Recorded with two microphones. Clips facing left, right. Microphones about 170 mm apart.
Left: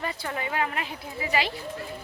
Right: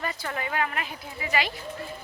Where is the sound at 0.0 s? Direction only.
30° left (ahead or behind).